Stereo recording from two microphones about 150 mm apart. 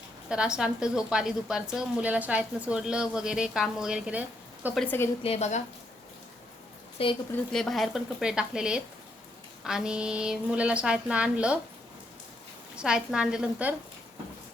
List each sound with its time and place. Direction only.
0.3 s a woman's voice: 5° right (ahead or behind)
5.2 s a woman's voice: 45° left (ahead or behind)
7.0 s a woman's voice: 40° left (ahead or behind)
7.5 s a woman's voice: centre (ahead or behind)
12.7 s a woman's voice: 5° right (ahead or behind)